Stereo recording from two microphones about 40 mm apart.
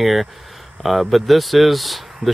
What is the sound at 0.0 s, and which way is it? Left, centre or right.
Speech, centre.